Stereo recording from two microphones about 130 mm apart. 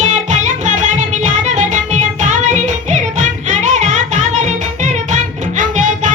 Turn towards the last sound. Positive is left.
turn(degrees=-75)  # may be behind; listen again after turning